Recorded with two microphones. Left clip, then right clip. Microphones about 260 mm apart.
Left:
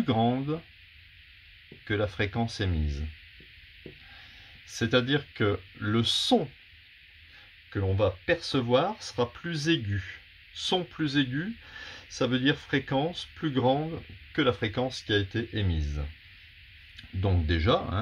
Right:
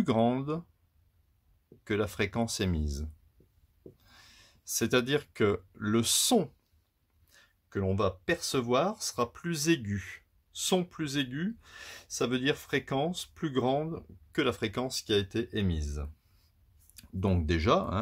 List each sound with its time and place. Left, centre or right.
0.0 s speech: right
1.9 s speech: right
4.6 s speech: right
7.7 s speech: right